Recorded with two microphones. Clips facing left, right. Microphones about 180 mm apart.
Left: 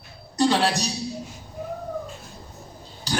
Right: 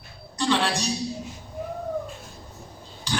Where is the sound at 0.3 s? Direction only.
40° left (ahead or behind).